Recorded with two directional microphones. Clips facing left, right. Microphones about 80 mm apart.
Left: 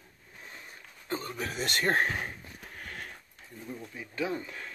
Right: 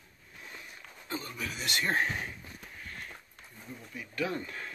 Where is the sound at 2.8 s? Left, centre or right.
Left.